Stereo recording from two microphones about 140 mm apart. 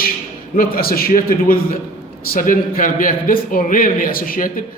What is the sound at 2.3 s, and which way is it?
A man's voice, 75° left (ahead or behind).